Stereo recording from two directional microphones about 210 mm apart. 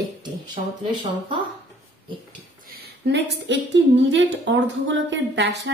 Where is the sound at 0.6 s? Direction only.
30° right (ahead or behind).